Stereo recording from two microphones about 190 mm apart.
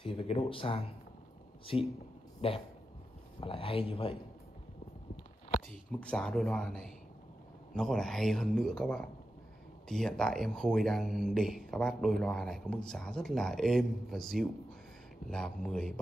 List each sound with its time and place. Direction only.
0.0 s speech: 30° left (ahead or behind)
5.7 s speech: 5° left (ahead or behind)